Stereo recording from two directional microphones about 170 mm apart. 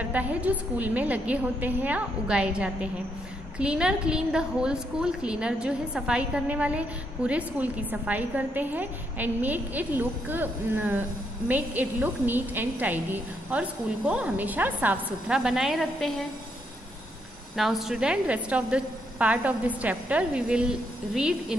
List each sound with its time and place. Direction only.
0.0 s a woman's voice: 10° right (ahead or behind)
17.6 s a woman's voice: centre (ahead or behind)